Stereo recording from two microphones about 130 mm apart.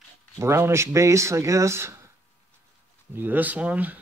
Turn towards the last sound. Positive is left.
turn(degrees=-10)  # may be behind; listen again after turning